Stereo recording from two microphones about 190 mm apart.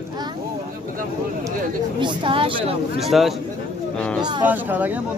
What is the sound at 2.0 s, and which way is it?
Speech, 25° right (ahead or behind).